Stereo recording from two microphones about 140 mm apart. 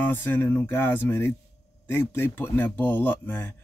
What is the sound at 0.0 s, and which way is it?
Speech, 15° left (ahead or behind).